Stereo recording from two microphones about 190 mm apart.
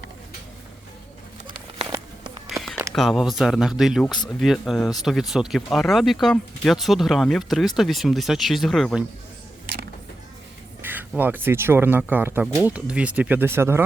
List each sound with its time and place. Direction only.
1.5 s music: 25° right (ahead or behind)
2.5 s a sound: centre (ahead or behind)
2.9 s speech: centre (ahead or behind)
10.8 s speech: 10° right (ahead or behind)